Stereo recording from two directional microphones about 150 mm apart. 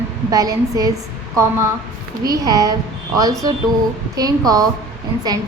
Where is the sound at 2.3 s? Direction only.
25° right (ahead or behind).